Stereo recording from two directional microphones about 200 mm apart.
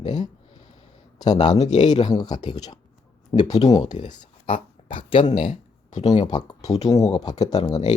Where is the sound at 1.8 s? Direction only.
20° left (ahead or behind).